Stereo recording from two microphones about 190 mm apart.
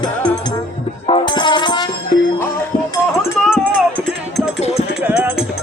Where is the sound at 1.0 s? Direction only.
25° left (ahead or behind).